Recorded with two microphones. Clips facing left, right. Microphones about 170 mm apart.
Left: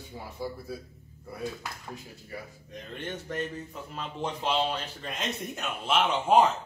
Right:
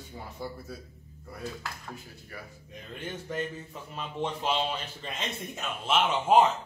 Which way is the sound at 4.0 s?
5° right (ahead or behind).